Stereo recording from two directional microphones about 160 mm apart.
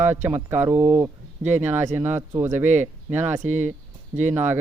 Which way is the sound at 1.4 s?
50° right (ahead or behind).